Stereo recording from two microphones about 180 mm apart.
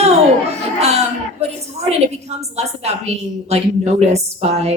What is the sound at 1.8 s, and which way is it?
A woman's voice, 35° right (ahead or behind).